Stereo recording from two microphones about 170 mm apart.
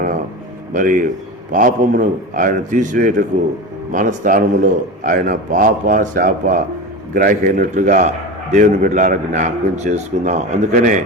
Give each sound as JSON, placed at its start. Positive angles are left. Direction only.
{"t": 0.7, "sound": "a man's voice", "side_deg": -50}